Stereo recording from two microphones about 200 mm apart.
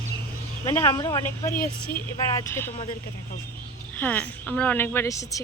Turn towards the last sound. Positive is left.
turn(degrees=15)  # may be behind; listen again after turning